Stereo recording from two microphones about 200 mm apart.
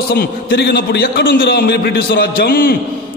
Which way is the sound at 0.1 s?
50° left (ahead or behind).